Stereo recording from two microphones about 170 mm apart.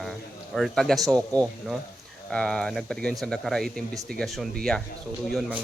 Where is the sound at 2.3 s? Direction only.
5° left (ahead or behind).